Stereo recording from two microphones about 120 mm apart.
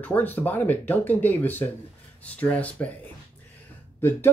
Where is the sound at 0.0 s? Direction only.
15° left (ahead or behind).